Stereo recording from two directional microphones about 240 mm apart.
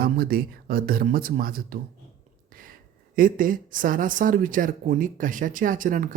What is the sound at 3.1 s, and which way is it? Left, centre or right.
Speech, right.